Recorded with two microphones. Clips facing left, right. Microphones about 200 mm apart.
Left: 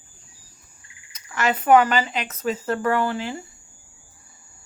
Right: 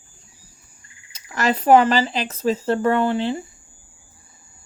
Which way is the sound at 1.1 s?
35° right (ahead or behind).